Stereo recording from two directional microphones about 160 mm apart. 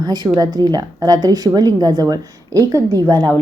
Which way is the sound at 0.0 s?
25° right (ahead or behind).